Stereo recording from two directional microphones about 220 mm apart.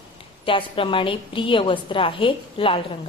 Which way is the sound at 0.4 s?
25° left (ahead or behind).